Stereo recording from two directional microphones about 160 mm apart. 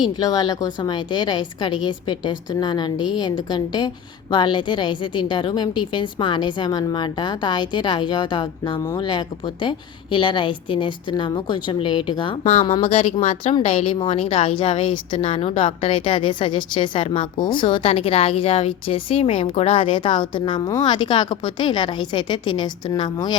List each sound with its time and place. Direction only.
0.0 s a woman's voice: 25° left (ahead or behind)